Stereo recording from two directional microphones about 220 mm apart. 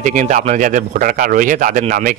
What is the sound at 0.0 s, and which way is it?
A man's voice, 35° right (ahead or behind).